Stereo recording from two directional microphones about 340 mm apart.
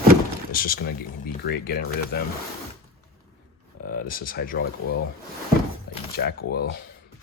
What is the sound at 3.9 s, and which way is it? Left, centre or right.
Speech, left.